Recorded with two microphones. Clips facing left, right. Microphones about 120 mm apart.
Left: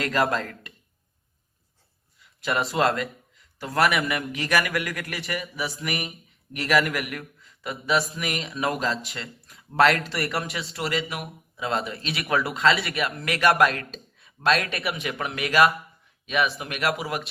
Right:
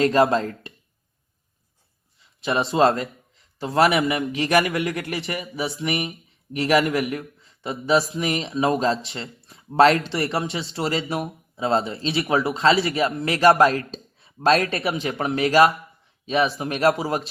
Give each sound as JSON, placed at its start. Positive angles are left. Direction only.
{"t": 0.0, "sound": "speech", "side_deg": -30}
{"t": 2.1, "sound": "a man's voice", "side_deg": -25}